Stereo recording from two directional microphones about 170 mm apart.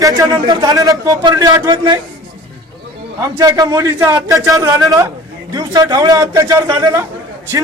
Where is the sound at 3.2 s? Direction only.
20° right (ahead or behind).